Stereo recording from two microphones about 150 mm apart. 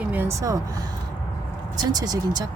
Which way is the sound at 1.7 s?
25° right (ahead or behind).